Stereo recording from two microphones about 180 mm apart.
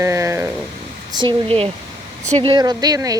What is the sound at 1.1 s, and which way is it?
Speech, 25° right (ahead or behind).